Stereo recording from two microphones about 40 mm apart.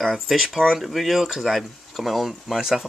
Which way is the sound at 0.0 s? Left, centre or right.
Centre.